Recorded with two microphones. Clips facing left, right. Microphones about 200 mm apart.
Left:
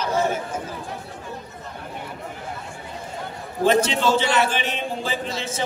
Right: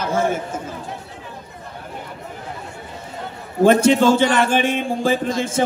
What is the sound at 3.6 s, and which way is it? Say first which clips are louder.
A man's voice: right 6 dB; 50° right (ahead or behind).